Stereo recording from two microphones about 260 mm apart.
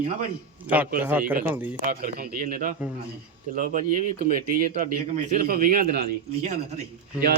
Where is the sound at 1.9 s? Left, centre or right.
Right.